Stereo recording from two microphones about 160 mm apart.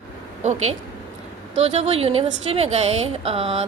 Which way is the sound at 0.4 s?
45° right (ahead or behind).